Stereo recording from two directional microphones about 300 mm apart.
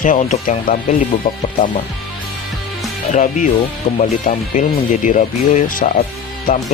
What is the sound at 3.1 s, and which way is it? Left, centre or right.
Speech, left.